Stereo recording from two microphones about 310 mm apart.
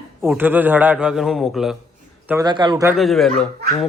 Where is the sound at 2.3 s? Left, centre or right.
Centre.